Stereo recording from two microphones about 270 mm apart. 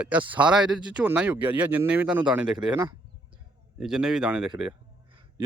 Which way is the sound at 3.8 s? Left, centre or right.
Centre.